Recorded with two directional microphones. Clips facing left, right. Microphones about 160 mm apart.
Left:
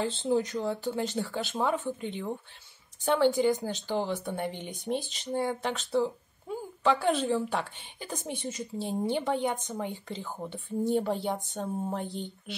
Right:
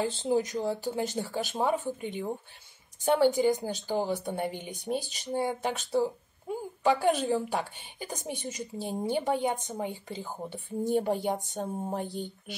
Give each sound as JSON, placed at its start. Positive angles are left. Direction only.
{"t": 0.0, "sound": "speech", "side_deg": -10}